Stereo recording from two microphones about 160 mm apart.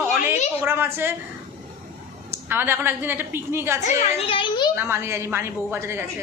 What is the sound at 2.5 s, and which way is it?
A woman's voice, 15° right (ahead or behind).